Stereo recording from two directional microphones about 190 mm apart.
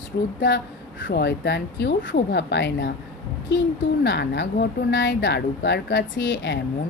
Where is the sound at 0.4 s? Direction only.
75° left (ahead or behind).